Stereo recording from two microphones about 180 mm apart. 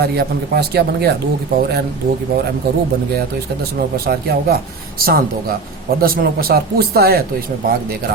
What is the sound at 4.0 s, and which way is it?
Speech, 60° right (ahead or behind).